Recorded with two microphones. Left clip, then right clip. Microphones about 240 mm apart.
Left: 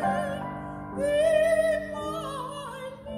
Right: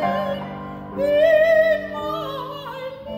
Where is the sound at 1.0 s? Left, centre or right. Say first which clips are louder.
Right 7 dB; centre.